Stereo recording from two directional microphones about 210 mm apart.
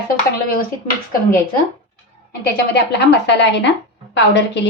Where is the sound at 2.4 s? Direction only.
50° left (ahead or behind).